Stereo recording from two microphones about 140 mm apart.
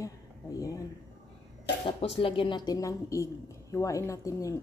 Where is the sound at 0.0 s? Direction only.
25° left (ahead or behind).